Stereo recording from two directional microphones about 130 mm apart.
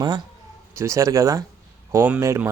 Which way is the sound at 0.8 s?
25° right (ahead or behind).